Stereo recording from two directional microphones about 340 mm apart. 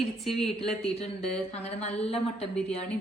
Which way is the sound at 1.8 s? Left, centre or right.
Centre.